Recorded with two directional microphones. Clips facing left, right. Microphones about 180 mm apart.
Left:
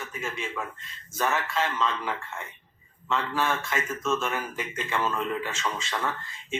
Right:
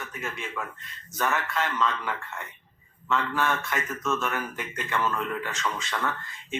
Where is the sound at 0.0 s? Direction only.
15° left (ahead or behind).